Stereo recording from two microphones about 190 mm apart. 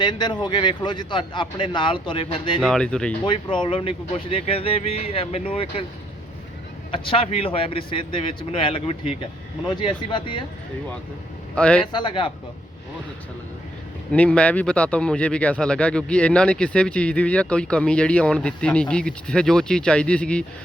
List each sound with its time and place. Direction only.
0.0 s a man's voice: 25° left (ahead or behind)
2.6 s speech: 5° left (ahead or behind)
3.2 s a man's voice: 25° left (ahead or behind)
6.9 s a man's voice: 30° left (ahead or behind)
11.5 s speech: 5° left (ahead or behind)
11.9 s a man's voice: 25° left (ahead or behind)
14.1 s speech: 5° left (ahead or behind)